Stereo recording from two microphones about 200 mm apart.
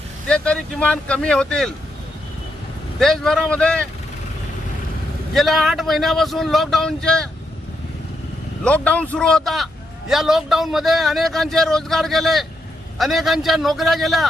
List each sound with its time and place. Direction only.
0.3 s speech: 5° left (ahead or behind)
3.0 s speech: centre (ahead or behind)
5.3 s speech: centre (ahead or behind)
8.6 s speech: 5° left (ahead or behind)